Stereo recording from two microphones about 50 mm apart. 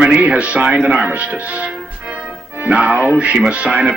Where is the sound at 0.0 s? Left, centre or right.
Right.